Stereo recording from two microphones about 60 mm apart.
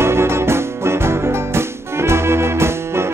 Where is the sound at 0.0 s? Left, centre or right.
Right.